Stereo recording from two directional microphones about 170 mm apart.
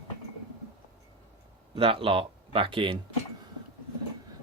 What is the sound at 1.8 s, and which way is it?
Speech, 30° right (ahead or behind).